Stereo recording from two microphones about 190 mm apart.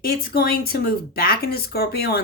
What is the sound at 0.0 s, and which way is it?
Speech, 50° left (ahead or behind).